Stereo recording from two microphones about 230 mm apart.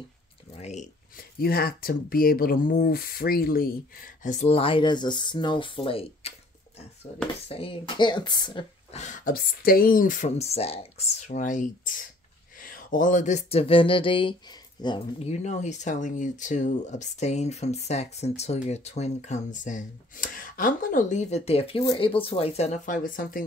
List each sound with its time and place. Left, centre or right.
0.6 s speech: left